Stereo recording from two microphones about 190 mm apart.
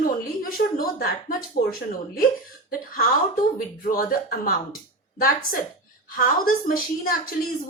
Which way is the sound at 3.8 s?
45° left (ahead or behind).